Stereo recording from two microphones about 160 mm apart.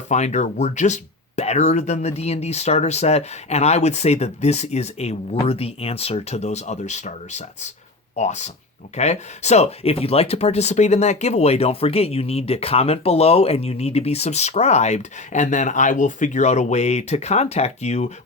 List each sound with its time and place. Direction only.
0.1 s speech: 45° left (ahead or behind)